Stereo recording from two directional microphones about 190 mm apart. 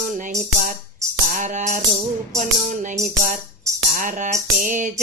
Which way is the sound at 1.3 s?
40° right (ahead or behind).